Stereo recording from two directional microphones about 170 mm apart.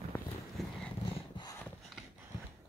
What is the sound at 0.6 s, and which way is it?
Purr, centre (ahead or behind).